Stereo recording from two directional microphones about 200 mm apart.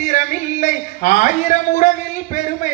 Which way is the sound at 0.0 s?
40° left (ahead or behind).